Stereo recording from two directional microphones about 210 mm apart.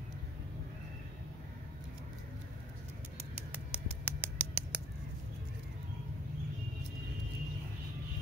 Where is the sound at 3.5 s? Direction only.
5° right (ahead or behind).